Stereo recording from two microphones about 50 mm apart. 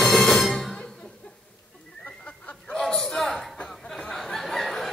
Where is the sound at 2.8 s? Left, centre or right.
Centre.